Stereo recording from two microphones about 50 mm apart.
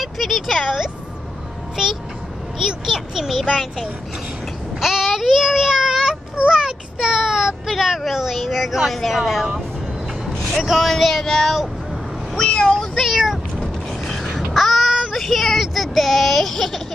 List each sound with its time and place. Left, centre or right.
0.0 s speech: centre
2.6 s a child's voice: centre
4.7 s child singing: centre
6.5 s a child's voice: centre
10.6 s speech: centre
12.4 s speech: centre
12.6 s child singing: centre
13.6 s mechanisms: centre
14.5 s child singing: centre